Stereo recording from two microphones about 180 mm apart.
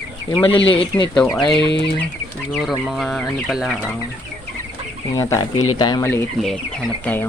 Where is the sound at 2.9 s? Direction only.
Centre (ahead or behind).